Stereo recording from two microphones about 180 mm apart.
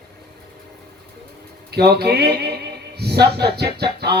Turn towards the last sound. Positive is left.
turn(degrees=-65)  # may be behind; listen again after turning